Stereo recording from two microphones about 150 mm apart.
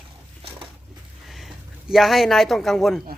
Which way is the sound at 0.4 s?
40° right (ahead or behind).